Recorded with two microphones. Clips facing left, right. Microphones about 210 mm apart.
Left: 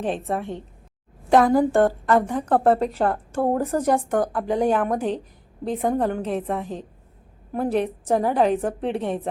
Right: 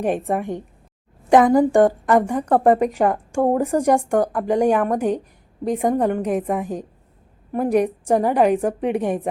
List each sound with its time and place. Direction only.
0.0 s a woman's voice: 15° right (ahead or behind)
1.4 s a woman's voice: centre (ahead or behind)
1.7 s a woman's voice: 15° right (ahead or behind)